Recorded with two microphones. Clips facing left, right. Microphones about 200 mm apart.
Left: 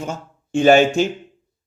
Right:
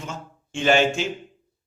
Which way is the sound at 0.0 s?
40° left (ahead or behind).